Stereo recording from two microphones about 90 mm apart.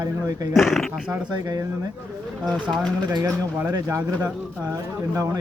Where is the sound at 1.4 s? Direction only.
45° right (ahead or behind).